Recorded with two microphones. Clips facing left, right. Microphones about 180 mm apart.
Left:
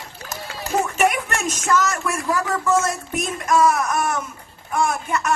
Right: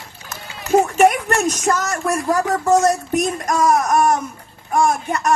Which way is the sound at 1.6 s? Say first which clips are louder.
Right 2 dB; 40° right (ahead or behind).